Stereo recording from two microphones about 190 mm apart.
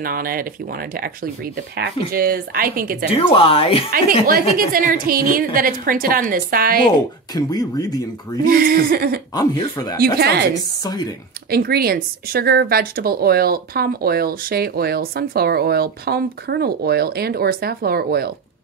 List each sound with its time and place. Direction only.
0.0 s speech: 50° right (ahead or behind)
3.1 s speech: 30° left (ahead or behind)
4.6 s speech: 45° right (ahead or behind)
7.3 s speech: 20° left (ahead or behind)
8.5 s speech: 50° right (ahead or behind)
9.3 s speech: 20° left (ahead or behind)
9.9 s speech: 55° right (ahead or behind)
10.8 s speech: 20° left (ahead or behind)
11.5 s speech: 55° right (ahead or behind)